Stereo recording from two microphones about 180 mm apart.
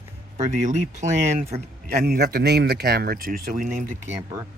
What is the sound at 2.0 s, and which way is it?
Speech, 65° right (ahead or behind).